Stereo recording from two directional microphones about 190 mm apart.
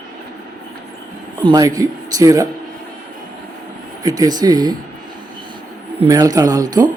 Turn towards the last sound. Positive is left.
turn(degrees=-20)  # may be behind; listen again after turning